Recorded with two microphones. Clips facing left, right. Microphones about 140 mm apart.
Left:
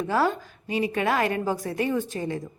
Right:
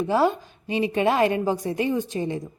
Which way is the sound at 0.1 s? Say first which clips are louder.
Right 2 dB; 20° right (ahead or behind).